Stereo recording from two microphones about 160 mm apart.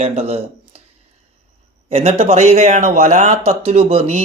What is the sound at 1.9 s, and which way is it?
Speech, 40° right (ahead or behind).